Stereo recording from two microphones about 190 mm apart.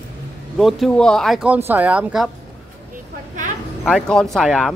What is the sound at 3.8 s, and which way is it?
Speech, 5° left (ahead or behind).